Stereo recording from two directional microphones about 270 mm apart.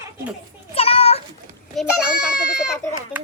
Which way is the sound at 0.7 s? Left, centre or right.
Left.